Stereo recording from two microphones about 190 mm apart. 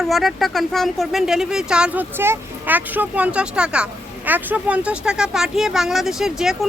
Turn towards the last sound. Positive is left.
turn(degrees=0)  # may be behind; listen again after turning